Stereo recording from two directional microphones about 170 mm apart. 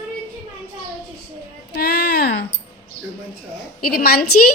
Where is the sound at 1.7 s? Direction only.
70° left (ahead or behind).